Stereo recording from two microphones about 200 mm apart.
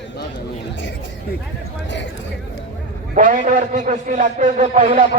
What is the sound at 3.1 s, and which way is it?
A man's voice, 40° right (ahead or behind).